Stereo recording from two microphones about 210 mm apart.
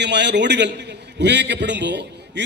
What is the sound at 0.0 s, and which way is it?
A man's voice, 55° right (ahead or behind).